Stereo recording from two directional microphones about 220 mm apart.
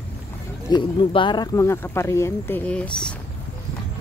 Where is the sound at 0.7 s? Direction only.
20° left (ahead or behind); by 3.1 s 5° left (ahead or behind).